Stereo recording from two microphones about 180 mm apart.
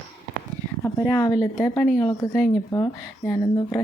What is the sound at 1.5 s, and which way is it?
Speech, 10° left (ahead or behind).